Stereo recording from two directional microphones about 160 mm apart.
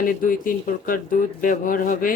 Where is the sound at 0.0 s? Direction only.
60° left (ahead or behind).